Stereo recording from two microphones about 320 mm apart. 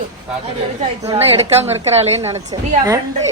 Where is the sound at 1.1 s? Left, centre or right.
Centre.